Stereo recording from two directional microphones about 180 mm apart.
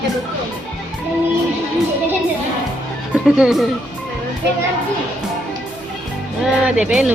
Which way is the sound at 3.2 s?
5° right (ahead or behind).